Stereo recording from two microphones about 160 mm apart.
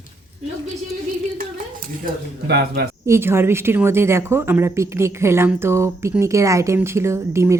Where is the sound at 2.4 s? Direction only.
90° right.